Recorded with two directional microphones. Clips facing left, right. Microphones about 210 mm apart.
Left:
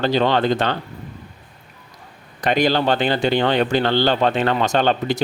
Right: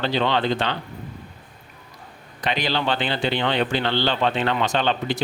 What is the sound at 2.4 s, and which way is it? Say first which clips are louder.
Speech: left 6 dB; 45° left (ahead or behind).